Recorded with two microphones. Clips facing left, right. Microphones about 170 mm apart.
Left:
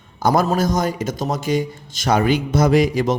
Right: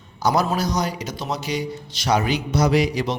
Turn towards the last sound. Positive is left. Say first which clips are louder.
# left 4 dB
turn(degrees=50)  # may be behind; listen again after turning